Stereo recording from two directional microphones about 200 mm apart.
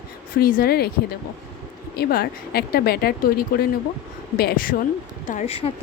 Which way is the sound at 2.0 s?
50° left (ahead or behind).